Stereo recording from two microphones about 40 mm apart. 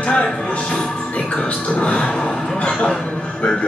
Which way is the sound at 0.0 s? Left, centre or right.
Left.